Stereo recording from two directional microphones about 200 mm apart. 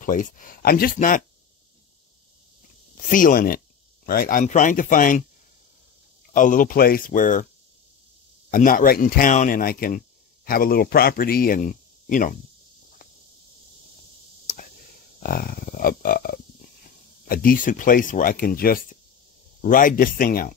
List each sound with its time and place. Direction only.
0.0 s speech: 40° left (ahead or behind)
3.1 s speech: 45° left (ahead or behind)
6.3 s speech: 40° left (ahead or behind)
8.5 s speech: 45° left (ahead or behind)
15.2 s speech: 45° left (ahead or behind)